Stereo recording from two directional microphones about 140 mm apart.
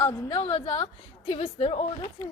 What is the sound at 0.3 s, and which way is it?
A woman's voice, 40° left (ahead or behind).